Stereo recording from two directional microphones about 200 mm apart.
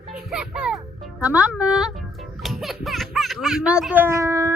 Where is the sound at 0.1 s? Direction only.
5° right (ahead or behind).